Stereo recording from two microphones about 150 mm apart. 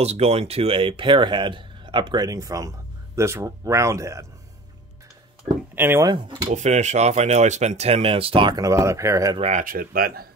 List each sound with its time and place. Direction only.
0.0 s speech: 45° right (ahead or behind); by 4.3 s 20° right (ahead or behind)
5.8 s speech: 15° right (ahead or behind)
6.0 s speech: 30° right (ahead or behind)
6.5 s speech: 50° right (ahead or behind); by 9.4 s 20° right (ahead or behind)
9.4 s speech: 50° right (ahead or behind)
9.7 s speech: 75° right (ahead or behind)